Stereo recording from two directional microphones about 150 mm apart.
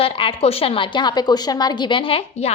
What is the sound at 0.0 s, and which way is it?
A woman's voice, 40° left (ahead or behind).